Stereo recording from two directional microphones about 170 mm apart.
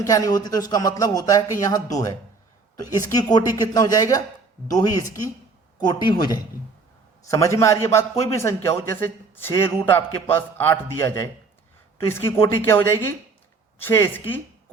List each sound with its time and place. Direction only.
0.0 s a man's voice: 20° left (ahead or behind)